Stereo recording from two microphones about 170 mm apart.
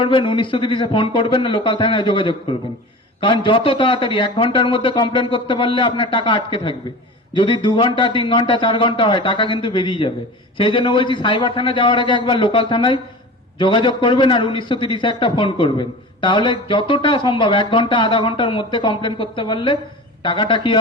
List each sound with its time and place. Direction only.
0.0 s a man's voice: 30° left (ahead or behind)